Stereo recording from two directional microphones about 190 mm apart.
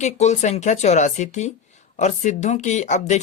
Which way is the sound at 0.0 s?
35° left (ahead or behind).